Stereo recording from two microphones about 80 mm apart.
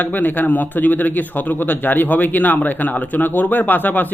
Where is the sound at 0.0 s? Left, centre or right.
Left.